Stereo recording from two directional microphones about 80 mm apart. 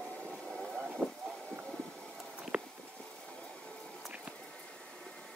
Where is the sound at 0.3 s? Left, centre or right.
Centre.